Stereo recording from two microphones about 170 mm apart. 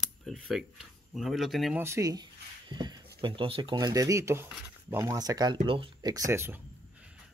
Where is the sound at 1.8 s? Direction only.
15° right (ahead or behind).